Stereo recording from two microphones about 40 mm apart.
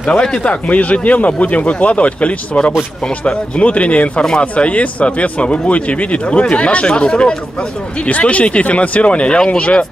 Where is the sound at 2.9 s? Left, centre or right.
Centre.